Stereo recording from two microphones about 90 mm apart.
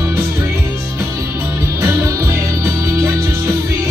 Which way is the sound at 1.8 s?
30° right (ahead or behind).